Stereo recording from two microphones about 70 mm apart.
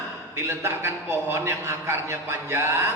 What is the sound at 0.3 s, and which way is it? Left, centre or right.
A man's voice, right.